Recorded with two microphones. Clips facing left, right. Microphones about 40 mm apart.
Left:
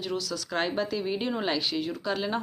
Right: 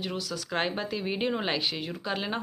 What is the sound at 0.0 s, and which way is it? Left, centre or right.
Speech, centre.